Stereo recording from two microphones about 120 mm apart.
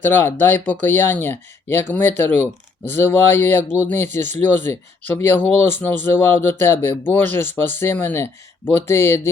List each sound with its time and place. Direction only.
0.1 s speech: 20° left (ahead or behind)